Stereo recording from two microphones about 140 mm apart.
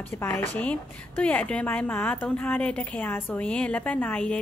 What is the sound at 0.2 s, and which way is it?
A woman's voice, 15° left (ahead or behind).